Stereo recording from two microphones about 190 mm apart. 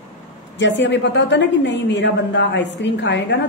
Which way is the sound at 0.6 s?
70° left (ahead or behind).